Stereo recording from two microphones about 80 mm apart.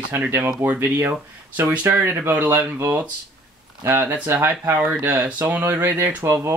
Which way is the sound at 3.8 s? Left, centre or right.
Right.